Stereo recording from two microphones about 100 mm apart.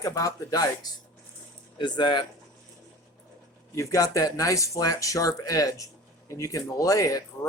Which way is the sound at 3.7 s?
35° left (ahead or behind).